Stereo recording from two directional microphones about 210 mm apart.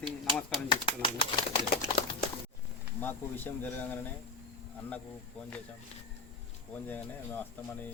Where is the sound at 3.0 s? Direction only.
10° left (ahead or behind).